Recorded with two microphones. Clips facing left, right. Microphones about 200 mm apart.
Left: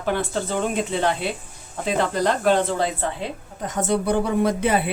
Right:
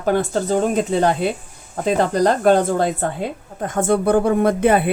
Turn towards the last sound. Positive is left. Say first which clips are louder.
# right 5 dB
turn(degrees=-55)  # may be behind; listen again after turning